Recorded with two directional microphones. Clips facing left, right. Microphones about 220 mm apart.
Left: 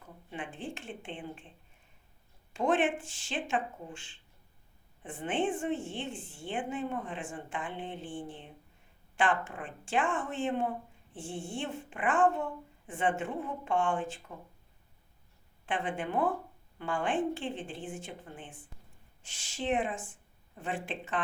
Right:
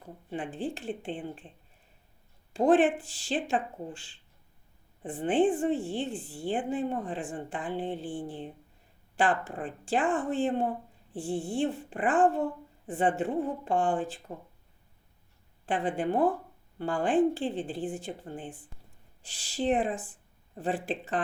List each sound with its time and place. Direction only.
0.0 s a woman's voice: 35° right (ahead or behind)
2.5 s a woman's voice: 35° right (ahead or behind)
15.6 s a woman's voice: 35° right (ahead or behind)